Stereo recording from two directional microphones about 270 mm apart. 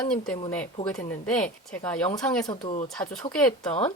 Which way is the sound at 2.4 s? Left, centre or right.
Centre.